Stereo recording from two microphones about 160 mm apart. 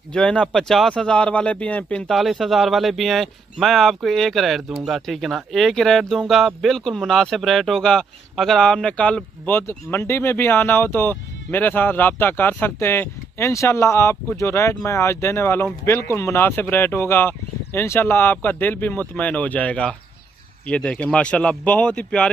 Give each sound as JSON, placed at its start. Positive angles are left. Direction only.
{"t": 0.1, "sound": "speech", "side_deg": 5}